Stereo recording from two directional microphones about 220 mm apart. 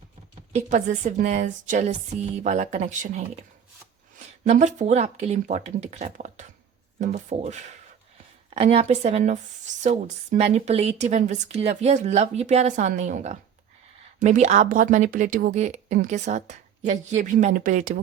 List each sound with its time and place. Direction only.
0.5 s speech: 35° right (ahead or behind)
4.4 s speech: 35° right (ahead or behind)